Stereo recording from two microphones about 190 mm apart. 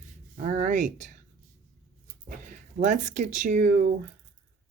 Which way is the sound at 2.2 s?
45° right (ahead or behind).